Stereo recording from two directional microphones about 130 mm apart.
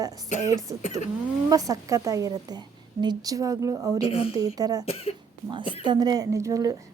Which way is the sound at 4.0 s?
50° left (ahead or behind).